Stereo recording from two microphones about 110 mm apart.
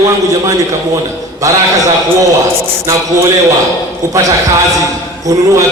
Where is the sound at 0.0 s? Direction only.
30° right (ahead or behind).